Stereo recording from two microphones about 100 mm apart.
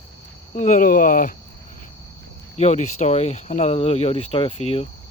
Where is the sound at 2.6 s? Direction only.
90° left.